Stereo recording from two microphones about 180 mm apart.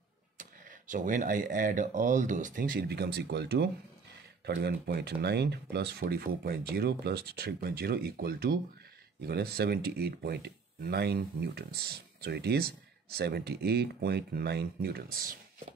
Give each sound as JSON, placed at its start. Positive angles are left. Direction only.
{"t": 0.4, "sound": "speech", "side_deg": -45}